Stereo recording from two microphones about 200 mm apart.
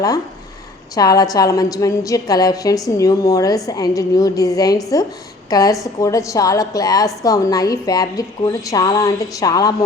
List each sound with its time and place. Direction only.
0.9 s a woman's voice: 20° left (ahead or behind)